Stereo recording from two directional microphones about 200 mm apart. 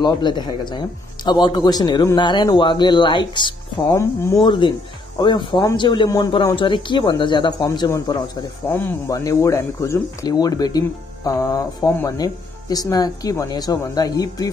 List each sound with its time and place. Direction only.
0.0 s speech: 20° left (ahead or behind)